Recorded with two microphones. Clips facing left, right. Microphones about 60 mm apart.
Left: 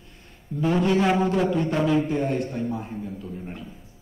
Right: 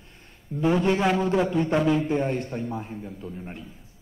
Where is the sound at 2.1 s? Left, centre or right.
Centre.